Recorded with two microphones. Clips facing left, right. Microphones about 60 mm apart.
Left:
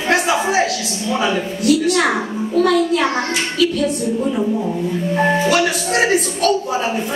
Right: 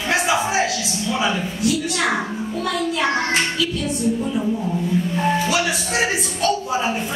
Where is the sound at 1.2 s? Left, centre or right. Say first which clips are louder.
Left 5 dB; left.